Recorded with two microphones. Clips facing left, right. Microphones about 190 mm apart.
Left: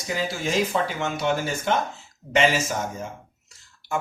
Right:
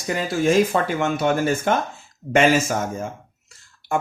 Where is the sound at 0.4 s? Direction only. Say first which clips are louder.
Right 7 dB; 55° right (ahead or behind).